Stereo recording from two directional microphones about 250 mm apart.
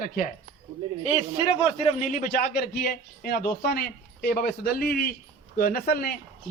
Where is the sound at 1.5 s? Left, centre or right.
Left.